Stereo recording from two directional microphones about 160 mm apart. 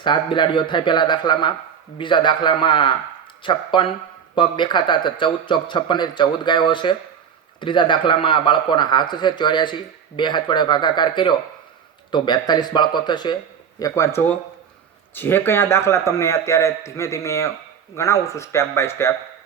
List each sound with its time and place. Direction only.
0.0 s a man's voice: 30° left (ahead or behind)